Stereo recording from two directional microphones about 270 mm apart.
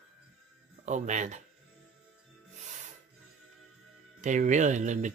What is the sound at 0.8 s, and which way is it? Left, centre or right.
Speech, right.